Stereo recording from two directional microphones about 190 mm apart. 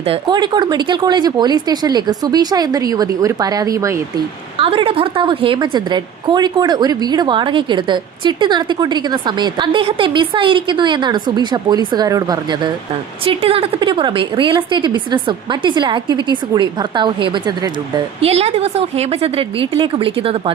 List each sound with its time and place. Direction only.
0.0 s a woman's voice: 25° right (ahead or behind)
4.5 s a woman's voice: 25° right (ahead or behind)